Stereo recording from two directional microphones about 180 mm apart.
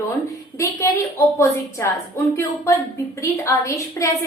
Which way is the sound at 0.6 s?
15° left (ahead or behind).